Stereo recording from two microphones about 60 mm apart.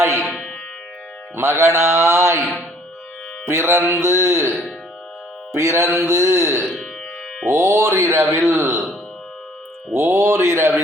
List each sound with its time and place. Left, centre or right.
0.2 s sitar: centre
1.4 s speech: right
3.4 s speech: right
5.5 s a man's voice: right
9.9 s speech: right